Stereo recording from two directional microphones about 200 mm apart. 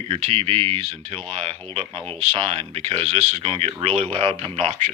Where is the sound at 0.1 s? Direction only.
30° right (ahead or behind).